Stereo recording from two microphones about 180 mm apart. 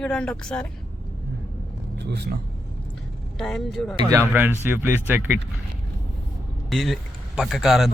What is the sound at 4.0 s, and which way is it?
Speech, 20° right (ahead or behind).